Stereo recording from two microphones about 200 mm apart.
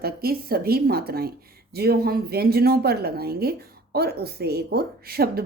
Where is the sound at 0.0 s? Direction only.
50° right (ahead or behind).